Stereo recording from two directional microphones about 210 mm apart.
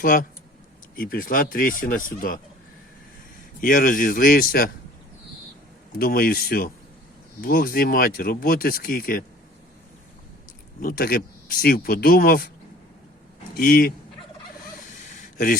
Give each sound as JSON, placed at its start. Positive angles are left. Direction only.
{"t": 0.0, "sound": "speech", "side_deg": 40}
{"t": 3.6, "sound": "speech", "side_deg": 40}
{"t": 6.0, "sound": "speech", "side_deg": 45}
{"t": 10.8, "sound": "speech", "side_deg": 45}
{"t": 13.6, "sound": "speech", "side_deg": 45}
{"t": 15.0, "sound": "a sound", "side_deg": 40}